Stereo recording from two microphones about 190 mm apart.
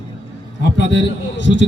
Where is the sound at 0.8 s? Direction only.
70° left (ahead or behind).